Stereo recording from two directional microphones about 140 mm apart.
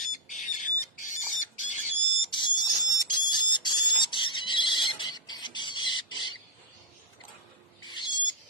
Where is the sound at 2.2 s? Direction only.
35° left (ahead or behind).